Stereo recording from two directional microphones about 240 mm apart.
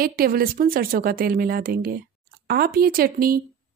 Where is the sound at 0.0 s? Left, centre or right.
Right.